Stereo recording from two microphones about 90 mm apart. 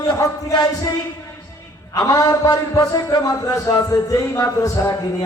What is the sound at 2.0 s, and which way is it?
A man's voice, 40° left (ahead or behind).